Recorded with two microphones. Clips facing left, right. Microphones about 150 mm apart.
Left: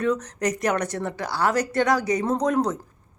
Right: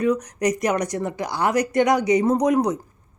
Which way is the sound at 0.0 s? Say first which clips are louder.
Right 3 dB; 10° right (ahead or behind).